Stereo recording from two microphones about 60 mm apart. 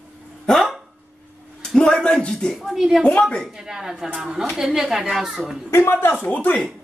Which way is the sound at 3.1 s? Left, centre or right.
Centre.